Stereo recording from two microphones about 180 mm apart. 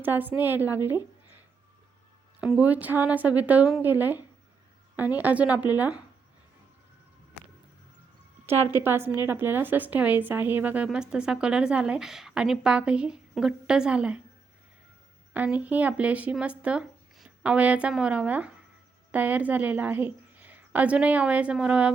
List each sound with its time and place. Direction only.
0.0 s speech: 10° right (ahead or behind)
2.4 s speech: 5° right (ahead or behind)
8.7 s a woman's voice: 15° right (ahead or behind)
15.3 s speech: 10° right (ahead or behind)